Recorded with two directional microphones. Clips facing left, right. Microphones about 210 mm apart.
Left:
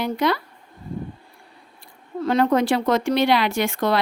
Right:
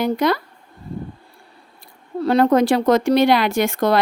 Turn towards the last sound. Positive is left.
turn(degrees=-40)  # may be behind; listen again after turning